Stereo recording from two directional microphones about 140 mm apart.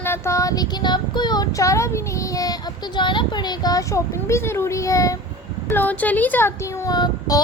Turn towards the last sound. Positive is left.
turn(degrees=25)  # may be behind; listen again after turning